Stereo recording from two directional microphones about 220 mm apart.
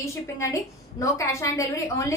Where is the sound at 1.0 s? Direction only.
15° left (ahead or behind).